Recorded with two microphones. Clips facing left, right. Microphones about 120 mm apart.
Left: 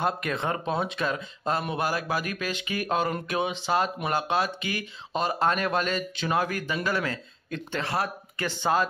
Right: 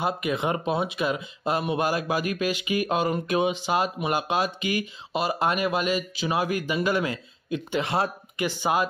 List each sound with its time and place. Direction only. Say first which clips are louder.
0.0 s speech: right 2 dB; 10° right (ahead or behind)
1.8 s speech: right 3 dB; 20° right (ahead or behind)